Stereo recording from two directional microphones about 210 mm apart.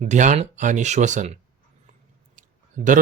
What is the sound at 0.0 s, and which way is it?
Speech, 35° right (ahead or behind).